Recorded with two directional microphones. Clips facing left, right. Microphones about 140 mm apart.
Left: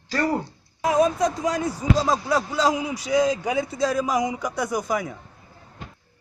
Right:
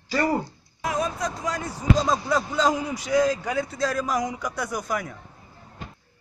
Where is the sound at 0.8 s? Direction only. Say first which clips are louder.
Left 7 dB; 20° left (ahead or behind).